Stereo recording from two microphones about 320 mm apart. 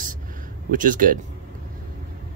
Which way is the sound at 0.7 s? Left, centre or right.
Right.